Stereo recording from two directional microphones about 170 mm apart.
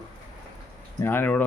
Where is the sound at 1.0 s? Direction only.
10° left (ahead or behind).